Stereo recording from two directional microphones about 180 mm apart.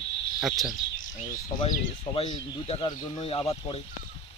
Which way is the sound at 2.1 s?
25° left (ahead or behind).